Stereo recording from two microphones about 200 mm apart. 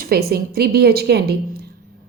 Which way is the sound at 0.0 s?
50° right (ahead or behind).